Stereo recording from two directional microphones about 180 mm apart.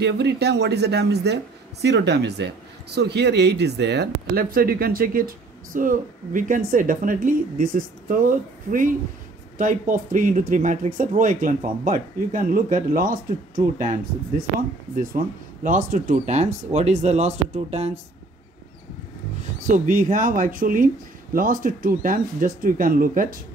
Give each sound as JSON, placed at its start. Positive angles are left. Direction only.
{"t": 0.0, "sound": "speech", "side_deg": -70}
{"t": 15.0, "sound": "speech", "side_deg": -45}
{"t": 19.6, "sound": "speech", "side_deg": -45}